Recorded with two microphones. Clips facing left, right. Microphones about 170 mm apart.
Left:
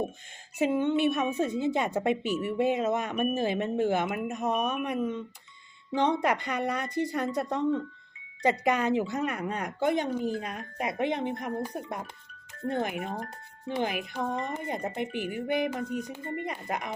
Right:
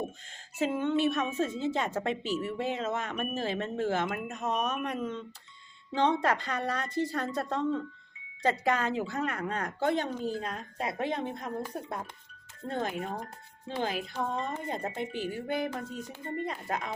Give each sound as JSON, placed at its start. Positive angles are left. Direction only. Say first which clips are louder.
{"t": 0.6, "sound": "speech", "louder": "left 3 dB", "side_deg": 15}